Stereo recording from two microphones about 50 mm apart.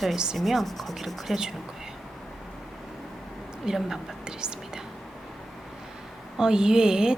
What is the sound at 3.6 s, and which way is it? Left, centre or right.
Speech, centre.